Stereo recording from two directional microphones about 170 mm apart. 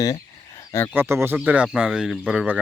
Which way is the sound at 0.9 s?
15° right (ahead or behind).